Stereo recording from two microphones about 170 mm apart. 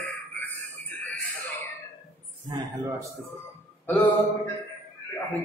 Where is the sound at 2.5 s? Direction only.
25° right (ahead or behind).